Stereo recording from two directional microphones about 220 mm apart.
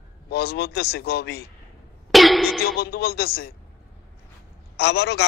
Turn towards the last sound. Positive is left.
turn(degrees=50)  # may be behind; listen again after turning